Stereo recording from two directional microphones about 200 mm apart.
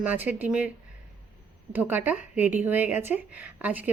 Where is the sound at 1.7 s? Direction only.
10° right (ahead or behind).